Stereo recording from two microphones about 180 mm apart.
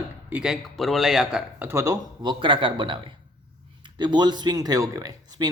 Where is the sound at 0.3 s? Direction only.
5° right (ahead or behind).